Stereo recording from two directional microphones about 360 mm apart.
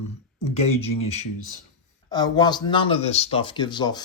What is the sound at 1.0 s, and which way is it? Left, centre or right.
Speech, centre.